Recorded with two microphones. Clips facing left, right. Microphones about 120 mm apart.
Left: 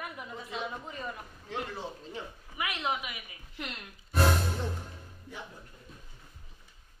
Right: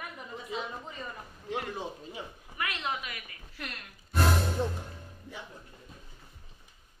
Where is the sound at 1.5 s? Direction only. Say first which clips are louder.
Right 2 dB; 15° right (ahead or behind).